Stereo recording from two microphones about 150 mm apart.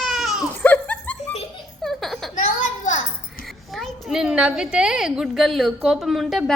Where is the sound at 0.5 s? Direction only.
10° left (ahead or behind).